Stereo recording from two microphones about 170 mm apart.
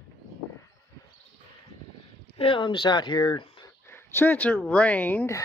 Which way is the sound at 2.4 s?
30° left (ahead or behind).